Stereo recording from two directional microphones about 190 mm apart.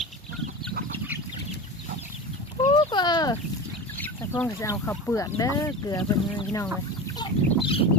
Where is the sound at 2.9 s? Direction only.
25° left (ahead or behind).